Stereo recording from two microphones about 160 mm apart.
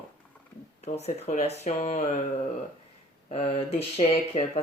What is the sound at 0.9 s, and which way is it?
Speech, 45° left (ahead or behind).